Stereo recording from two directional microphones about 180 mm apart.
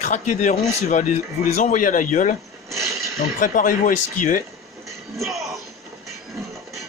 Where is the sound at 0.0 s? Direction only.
45° left (ahead or behind).